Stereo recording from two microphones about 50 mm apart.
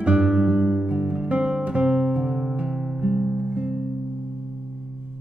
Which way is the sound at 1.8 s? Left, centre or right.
Centre.